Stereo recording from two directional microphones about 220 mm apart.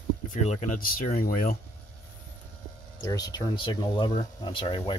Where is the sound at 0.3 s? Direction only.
35° left (ahead or behind).